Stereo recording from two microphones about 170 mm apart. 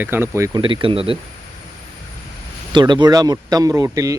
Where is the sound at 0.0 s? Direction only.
10° right (ahead or behind).